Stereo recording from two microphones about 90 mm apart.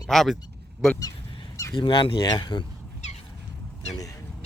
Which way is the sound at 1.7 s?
65° left (ahead or behind).